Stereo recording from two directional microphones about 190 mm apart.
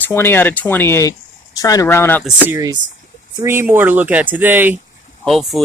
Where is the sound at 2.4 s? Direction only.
10° right (ahead or behind).